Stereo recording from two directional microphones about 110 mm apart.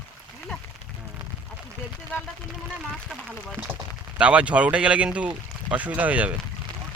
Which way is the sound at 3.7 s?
15° right (ahead or behind).